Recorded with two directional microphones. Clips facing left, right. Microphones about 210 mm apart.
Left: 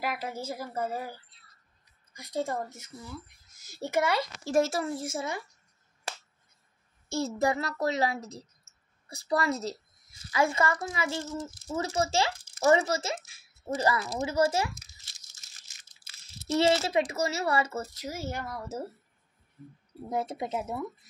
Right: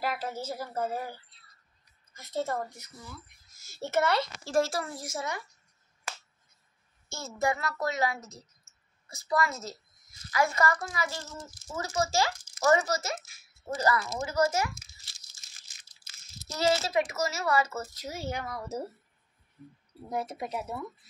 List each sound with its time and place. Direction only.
0.0 s a woman's voice: 10° left (ahead or behind)
2.1 s a woman's voice: 15° left (ahead or behind)
7.1 s a child's voice: 35° left (ahead or behind)
16.4 s a child's voice: 30° left (ahead or behind)
18.0 s a woman's voice: 5° left (ahead or behind)
20.1 s speech: 25° left (ahead or behind)